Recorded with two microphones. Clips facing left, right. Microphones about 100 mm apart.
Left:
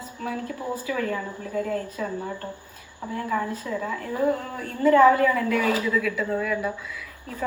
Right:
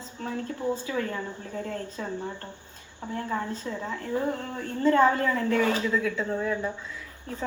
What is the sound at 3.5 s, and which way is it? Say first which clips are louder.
A woman's voice: left 4 dB; 25° right (ahead or behind).